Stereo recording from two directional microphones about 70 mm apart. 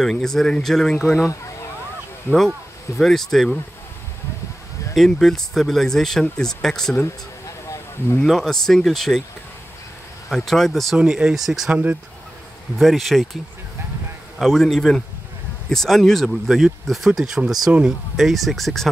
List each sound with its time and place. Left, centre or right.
0.0 s speech: centre
1.2 s a sound: left
2.3 s speech: left
3.0 s speech: centre
4.9 s speech: centre
8.2 s speech: centre
10.3 s speech: centre
11.0 s speech: centre
11.7 s speech: right
12.7 s speech: centre
14.4 s speech: centre